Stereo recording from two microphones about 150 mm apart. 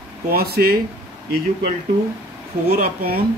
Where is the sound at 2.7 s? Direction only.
80° right.